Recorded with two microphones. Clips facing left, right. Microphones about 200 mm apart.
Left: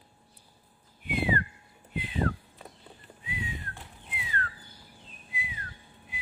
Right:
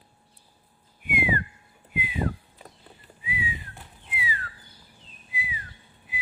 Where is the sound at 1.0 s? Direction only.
10° right (ahead or behind).